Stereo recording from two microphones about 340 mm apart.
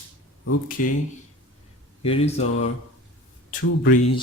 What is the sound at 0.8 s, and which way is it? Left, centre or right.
Speech, left.